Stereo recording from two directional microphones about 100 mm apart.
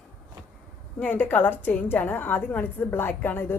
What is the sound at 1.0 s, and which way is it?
A woman's voice, 15° left (ahead or behind).